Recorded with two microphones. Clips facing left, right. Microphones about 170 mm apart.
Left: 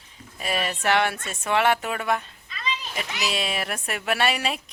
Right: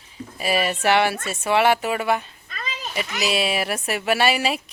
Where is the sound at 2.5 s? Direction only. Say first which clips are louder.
Left 2 dB; 50° right (ahead or behind).